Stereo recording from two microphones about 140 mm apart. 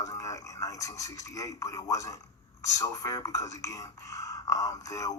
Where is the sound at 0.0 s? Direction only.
25° left (ahead or behind).